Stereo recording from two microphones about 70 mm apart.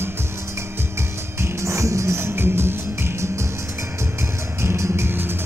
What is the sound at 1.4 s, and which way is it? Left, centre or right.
Music, right.